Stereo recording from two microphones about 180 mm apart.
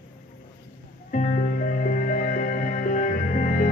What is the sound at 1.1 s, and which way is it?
Music, 50° left (ahead or behind).